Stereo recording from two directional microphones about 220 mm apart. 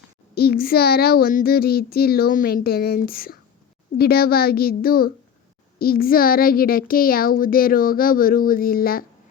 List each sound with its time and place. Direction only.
0.3 s a child's voice: 45° left (ahead or behind)